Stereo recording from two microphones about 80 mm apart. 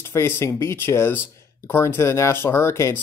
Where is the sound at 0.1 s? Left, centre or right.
Left.